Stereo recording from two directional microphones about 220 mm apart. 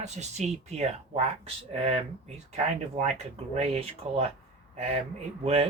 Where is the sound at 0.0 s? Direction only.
30° right (ahead or behind).